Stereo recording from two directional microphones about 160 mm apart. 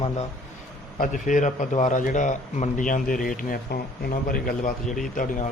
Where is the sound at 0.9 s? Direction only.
55° left (ahead or behind).